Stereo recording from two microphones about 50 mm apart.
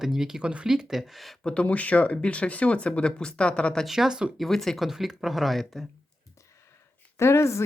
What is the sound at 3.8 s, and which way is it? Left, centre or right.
Speech, centre.